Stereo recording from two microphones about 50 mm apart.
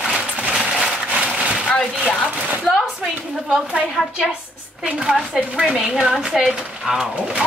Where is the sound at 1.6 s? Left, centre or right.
Centre.